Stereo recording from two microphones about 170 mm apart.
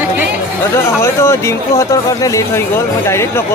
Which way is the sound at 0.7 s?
15° left (ahead or behind).